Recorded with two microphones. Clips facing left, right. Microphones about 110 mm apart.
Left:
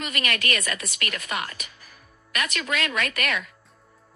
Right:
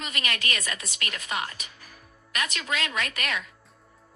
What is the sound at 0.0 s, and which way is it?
A woman's voice, 55° left (ahead or behind).